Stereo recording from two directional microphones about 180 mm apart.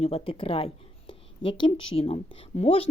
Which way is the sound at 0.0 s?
30° left (ahead or behind).